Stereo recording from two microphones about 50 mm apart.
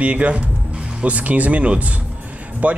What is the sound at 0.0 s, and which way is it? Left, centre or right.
A man's voice, right.